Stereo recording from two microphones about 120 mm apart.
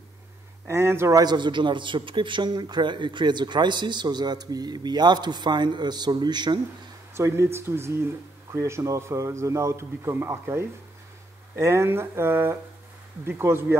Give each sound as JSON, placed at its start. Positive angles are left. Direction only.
{"t": 0.7, "sound": "a man's voice", "side_deg": -20}
{"t": 1.2, "sound": "a man's voice", "side_deg": -40}
{"t": 7.2, "sound": "a man's voice", "side_deg": -20}